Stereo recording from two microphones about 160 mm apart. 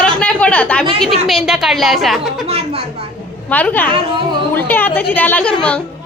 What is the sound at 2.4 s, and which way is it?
Speech, 40° right (ahead or behind).